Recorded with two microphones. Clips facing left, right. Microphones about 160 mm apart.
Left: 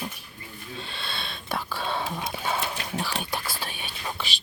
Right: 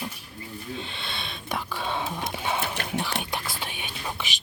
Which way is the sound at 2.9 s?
20° right (ahead or behind).